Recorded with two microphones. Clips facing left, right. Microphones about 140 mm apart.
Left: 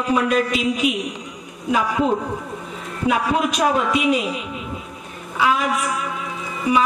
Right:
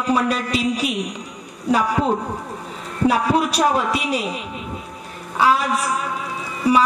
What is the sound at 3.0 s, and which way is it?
Speech, 35° right (ahead or behind).